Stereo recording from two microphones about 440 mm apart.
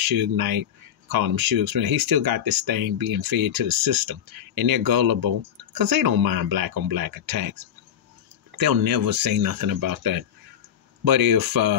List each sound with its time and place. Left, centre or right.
0.0 s speech: right